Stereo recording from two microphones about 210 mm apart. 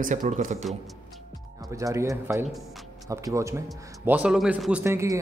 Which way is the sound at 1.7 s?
15° right (ahead or behind).